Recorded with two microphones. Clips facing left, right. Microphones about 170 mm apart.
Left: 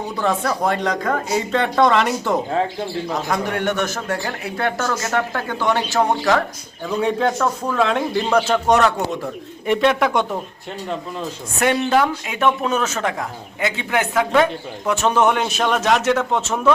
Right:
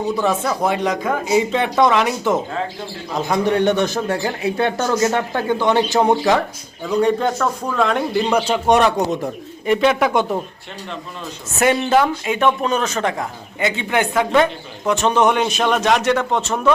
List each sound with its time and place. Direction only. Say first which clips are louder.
0.2 s speech: left 3 dB; 5° right (ahead or behind)
3.2 s speech: right 8 dB; 20° right (ahead or behind)
6.8 s speech: right 2 dB; centre (ahead or behind)
8.3 s speech: even; 10° right (ahead or behind)
9.6 s speech: right 1 dB; centre (ahead or behind)
11.6 s speech: right 2 dB; 5° right (ahead or behind)